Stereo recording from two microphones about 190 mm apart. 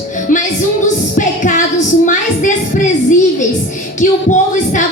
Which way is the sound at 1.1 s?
45° left (ahead or behind).